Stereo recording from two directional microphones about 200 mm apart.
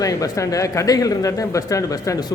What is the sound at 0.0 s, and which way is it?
Speech, 15° left (ahead or behind).